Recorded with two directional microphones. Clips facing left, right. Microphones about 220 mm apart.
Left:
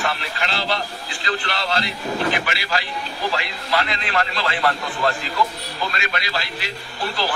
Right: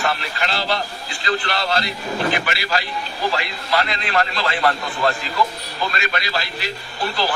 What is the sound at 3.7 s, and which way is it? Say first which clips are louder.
Speech: right 2 dB; 40° right (ahead or behind).